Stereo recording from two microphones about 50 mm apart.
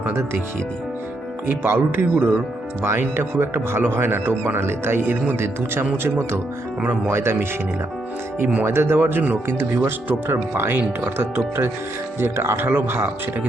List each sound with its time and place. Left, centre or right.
1.5 s speech: right
7.1 s speech: right
8.6 s speech: right
9.5 s speech: right
10.2 s speech: right